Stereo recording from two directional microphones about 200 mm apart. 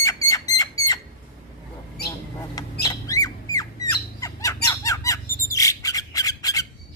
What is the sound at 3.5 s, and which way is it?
Bird, 15° left (ahead or behind).